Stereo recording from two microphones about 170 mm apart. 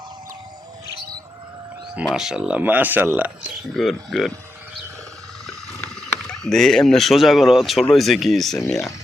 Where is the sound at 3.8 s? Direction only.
Centre (ahead or behind).